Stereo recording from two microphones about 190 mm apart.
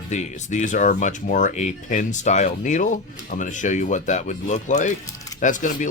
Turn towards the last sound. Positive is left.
turn(degrees=40)  # may be behind; listen again after turning